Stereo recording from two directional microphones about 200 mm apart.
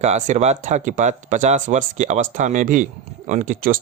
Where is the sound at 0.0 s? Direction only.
35° right (ahead or behind).